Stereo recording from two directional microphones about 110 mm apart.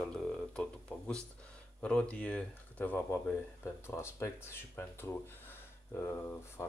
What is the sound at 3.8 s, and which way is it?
Speech, 25° left (ahead or behind).